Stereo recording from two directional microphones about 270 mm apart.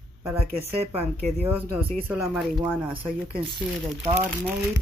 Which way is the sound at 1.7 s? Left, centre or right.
Centre.